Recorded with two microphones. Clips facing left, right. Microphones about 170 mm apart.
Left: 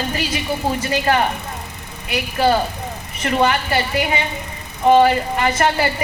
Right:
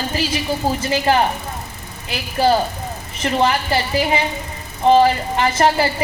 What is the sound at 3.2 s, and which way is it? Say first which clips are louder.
Speech: even; 25° right (ahead or behind).